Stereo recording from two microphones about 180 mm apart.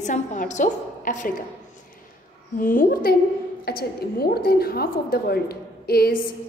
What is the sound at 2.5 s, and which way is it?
A woman's voice, 50° left (ahead or behind).